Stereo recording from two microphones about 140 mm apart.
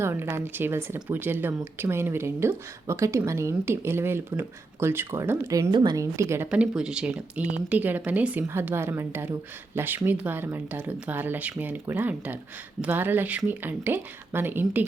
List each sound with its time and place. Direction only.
0.0 s speech: 15° right (ahead or behind)
6.5 s speech: 5° right (ahead or behind)